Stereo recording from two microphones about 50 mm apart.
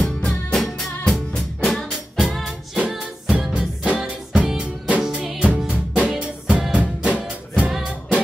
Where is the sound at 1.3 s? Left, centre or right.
Centre.